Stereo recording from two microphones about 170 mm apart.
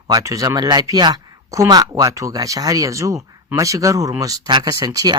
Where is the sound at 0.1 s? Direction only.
20° right (ahead or behind).